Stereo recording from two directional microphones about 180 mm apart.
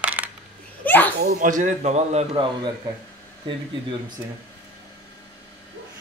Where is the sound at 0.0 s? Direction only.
10° right (ahead or behind).